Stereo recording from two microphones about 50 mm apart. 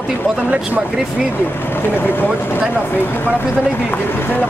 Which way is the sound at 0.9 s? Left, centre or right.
Centre.